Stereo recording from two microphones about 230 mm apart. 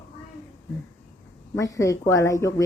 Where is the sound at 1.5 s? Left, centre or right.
Centre.